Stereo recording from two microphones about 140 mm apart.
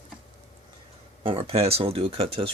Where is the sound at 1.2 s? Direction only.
40° right (ahead or behind).